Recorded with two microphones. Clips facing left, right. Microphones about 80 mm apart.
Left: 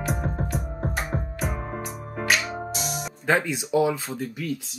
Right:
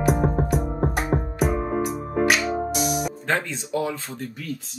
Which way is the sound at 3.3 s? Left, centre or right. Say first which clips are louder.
Left 5 dB; centre.